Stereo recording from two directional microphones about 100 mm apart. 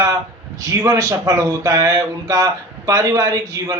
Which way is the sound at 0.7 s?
35° right (ahead or behind).